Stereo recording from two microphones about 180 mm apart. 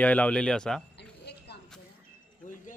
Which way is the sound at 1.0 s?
65° left (ahead or behind).